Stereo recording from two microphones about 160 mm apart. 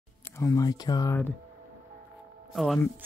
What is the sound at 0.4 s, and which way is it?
Speech, 20° left (ahead or behind).